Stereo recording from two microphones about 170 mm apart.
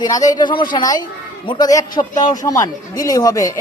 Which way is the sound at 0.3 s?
25° left (ahead or behind).